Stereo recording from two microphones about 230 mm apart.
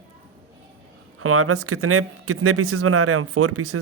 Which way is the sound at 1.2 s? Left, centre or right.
Right.